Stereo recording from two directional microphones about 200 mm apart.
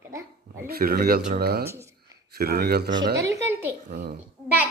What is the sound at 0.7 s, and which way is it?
A woman's voice, 50° right (ahead or behind).